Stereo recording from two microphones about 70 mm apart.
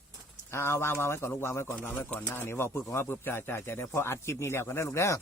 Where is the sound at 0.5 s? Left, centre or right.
Left.